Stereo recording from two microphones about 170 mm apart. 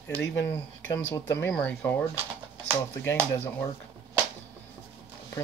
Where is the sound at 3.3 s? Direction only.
15° left (ahead or behind).